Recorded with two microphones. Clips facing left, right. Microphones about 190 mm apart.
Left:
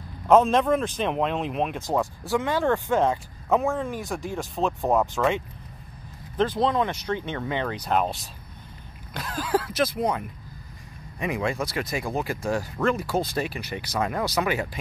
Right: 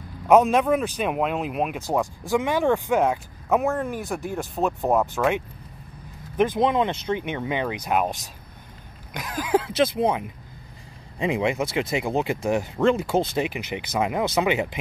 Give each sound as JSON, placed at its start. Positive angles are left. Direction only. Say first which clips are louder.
{"t": 0.3, "sound": "speech", "louder": "right 1 dB", "side_deg": -10}
{"t": 6.3, "sound": "speech", "louder": "right 2 dB", "side_deg": -20}